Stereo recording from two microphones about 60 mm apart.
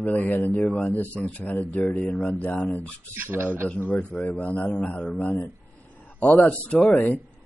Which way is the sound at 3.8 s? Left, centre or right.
Left.